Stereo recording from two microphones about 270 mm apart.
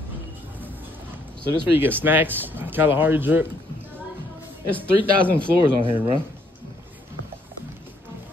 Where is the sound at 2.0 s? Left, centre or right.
Centre.